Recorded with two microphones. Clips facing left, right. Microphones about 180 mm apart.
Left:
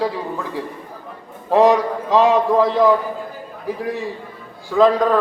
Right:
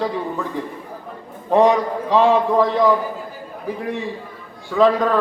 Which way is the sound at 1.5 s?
5° left (ahead or behind).